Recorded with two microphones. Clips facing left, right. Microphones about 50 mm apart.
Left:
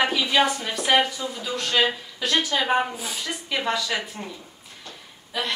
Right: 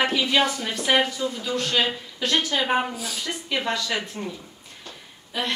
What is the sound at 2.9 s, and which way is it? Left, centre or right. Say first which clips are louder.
Speech: even; left.